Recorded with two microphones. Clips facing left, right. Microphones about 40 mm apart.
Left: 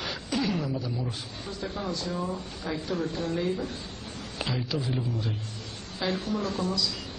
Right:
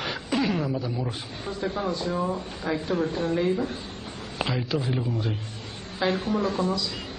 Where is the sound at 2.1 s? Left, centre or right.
Right.